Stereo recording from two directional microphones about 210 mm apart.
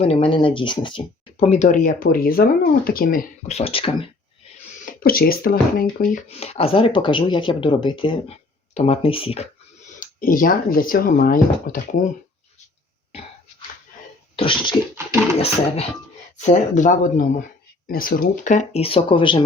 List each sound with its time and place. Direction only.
0.0 s speech: 30° left (ahead or behind)
4.9 s speech: 45° left (ahead or behind)
6.2 s speech: 30° left (ahead or behind)
10.0 s speech: 40° left (ahead or behind)
14.3 s speech: 25° left (ahead or behind)